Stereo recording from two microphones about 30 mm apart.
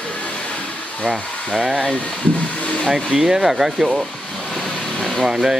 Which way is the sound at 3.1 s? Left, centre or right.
Centre.